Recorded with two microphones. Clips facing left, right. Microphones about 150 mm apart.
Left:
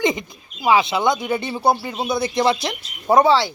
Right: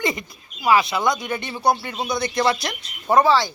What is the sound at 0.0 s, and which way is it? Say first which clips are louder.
Speech: left 4 dB; 20° left (ahead or behind).